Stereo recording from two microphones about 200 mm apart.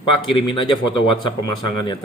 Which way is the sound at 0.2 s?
25° left (ahead or behind).